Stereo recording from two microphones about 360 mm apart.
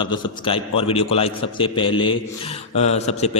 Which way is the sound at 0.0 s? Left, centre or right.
Centre.